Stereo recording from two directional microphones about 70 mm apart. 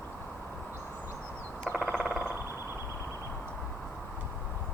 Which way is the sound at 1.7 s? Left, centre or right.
Right.